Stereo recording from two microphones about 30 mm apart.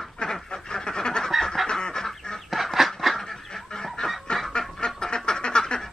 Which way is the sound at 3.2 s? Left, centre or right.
Centre.